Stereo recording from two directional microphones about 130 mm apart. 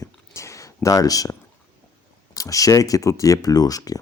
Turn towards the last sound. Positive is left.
turn(degrees=30)  # may be behind; listen again after turning